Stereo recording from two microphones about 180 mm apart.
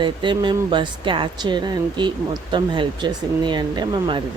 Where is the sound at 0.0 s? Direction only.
25° right (ahead or behind).